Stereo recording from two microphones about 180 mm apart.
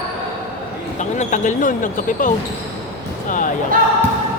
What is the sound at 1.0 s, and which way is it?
Speech, 40° left (ahead or behind).